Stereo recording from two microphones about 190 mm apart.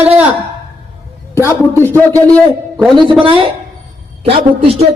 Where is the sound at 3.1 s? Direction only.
25° right (ahead or behind).